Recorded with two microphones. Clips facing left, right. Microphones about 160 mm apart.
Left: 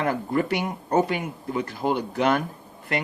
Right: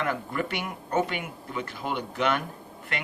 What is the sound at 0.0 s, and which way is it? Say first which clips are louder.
Speech: left 5 dB; 35° left (ahead or behind).